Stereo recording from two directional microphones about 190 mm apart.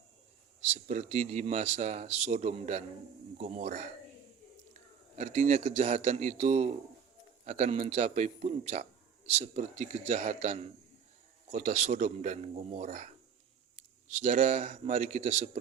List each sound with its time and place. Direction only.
0.7 s a man's voice: 40° right (ahead or behind)
5.1 s a man's voice: 35° right (ahead or behind)